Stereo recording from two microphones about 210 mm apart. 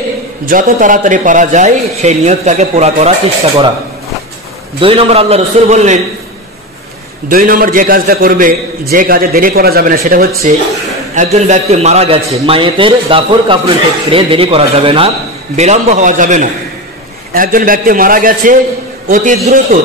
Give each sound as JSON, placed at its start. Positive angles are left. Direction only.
{"t": 0.5, "sound": "a man's voice", "side_deg": -40}
{"t": 4.7, "sound": "a man's voice", "side_deg": -25}
{"t": 7.2, "sound": "a man's voice", "side_deg": -45}